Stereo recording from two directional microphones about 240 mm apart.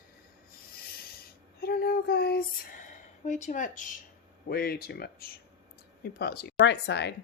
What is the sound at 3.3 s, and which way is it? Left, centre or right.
Speech, left.